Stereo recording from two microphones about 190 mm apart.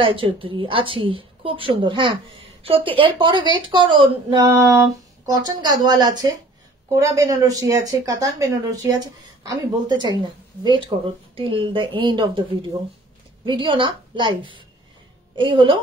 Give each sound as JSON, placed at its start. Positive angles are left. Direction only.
{"t": 0.0, "sound": "a woman's voice", "side_deg": -30}
{"t": 13.5, "sound": "a woman's voice", "side_deg": -25}